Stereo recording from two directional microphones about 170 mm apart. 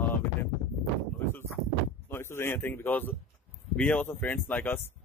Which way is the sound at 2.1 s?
15° left (ahead or behind).